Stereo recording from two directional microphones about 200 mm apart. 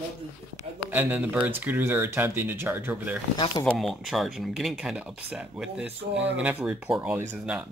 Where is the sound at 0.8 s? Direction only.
10° right (ahead or behind).